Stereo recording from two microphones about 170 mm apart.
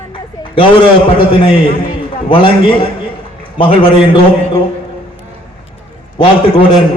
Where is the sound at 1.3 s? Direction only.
30° left (ahead or behind).